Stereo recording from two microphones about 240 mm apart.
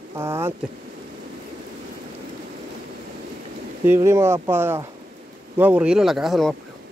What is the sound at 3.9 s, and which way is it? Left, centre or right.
Speech, centre.